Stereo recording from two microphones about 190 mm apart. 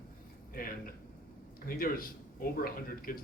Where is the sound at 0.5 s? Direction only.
50° left (ahead or behind).